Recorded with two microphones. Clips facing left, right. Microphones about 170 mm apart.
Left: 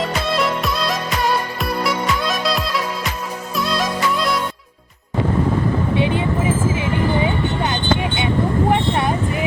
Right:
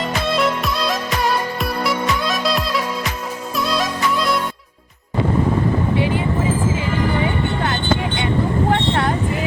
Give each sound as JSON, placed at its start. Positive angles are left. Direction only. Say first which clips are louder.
{"t": 0.3, "sound": "music", "louder": "right 3 dB", "side_deg": 0}
{"t": 6.0, "sound": "vehicle", "louder": "left 1 dB", "side_deg": 20}
{"t": 7.6, "sound": "music", "louder": "even", "side_deg": 20}
{"t": 8.7, "sound": "vehicle", "louder": "even", "side_deg": 15}